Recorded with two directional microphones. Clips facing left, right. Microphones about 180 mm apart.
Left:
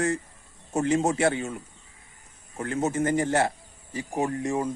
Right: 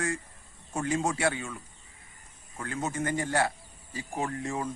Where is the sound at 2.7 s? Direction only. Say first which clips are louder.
Left 6 dB; 40° left (ahead or behind).